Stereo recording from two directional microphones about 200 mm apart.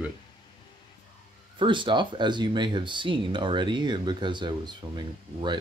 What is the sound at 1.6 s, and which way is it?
Speech, 25° right (ahead or behind).